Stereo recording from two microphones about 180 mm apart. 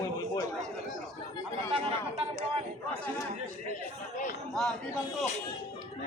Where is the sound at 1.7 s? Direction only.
35° right (ahead or behind).